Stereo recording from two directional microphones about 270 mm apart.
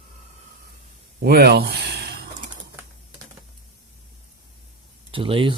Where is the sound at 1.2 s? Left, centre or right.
Right.